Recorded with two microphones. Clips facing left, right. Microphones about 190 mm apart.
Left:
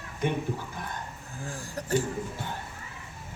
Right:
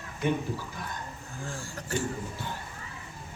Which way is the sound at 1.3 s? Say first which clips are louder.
Left 1 dB; 35° left (ahead or behind).